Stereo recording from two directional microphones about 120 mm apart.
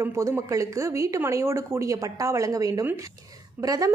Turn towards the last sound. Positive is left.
turn(degrees=-30)  # may be behind; listen again after turning